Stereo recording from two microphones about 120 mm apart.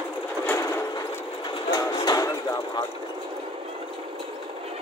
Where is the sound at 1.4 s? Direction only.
40° left (ahead or behind).